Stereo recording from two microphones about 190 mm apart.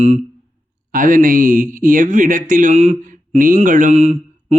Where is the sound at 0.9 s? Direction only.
45° right (ahead or behind).